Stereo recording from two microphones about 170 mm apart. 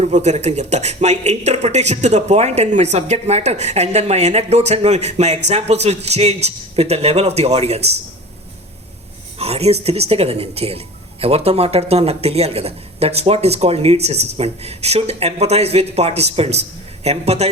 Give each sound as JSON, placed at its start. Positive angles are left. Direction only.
{"t": 0.0, "sound": "speech", "side_deg": -40}
{"t": 9.4, "sound": "speech", "side_deg": -35}